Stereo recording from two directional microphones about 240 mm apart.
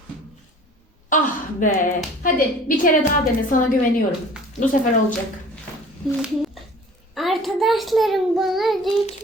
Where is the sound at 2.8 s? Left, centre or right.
Left.